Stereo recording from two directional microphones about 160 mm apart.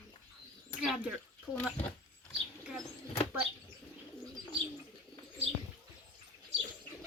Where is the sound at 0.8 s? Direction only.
5° right (ahead or behind).